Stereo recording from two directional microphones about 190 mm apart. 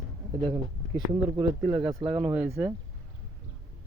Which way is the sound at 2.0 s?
30° right (ahead or behind).